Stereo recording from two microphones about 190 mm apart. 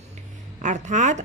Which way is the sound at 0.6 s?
40° right (ahead or behind).